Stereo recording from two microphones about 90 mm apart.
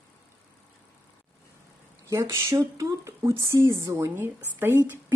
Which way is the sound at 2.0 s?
40° right (ahead or behind).